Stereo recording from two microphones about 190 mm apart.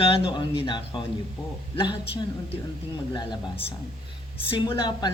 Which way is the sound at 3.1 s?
25° left (ahead or behind).